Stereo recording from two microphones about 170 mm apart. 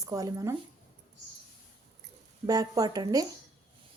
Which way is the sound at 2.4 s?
20° right (ahead or behind).